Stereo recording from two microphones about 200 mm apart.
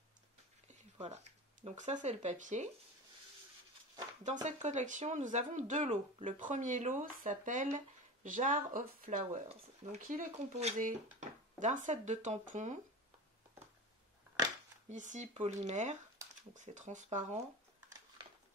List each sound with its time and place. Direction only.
0.9 s speech: 30° right (ahead or behind)
4.2 s speech: 35° right (ahead or behind)
14.9 s speech: 35° right (ahead or behind)